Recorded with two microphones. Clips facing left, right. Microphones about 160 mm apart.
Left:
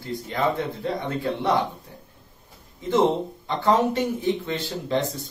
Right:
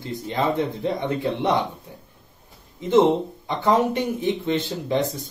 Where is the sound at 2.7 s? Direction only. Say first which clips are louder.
Right 5 dB; 20° right (ahead or behind).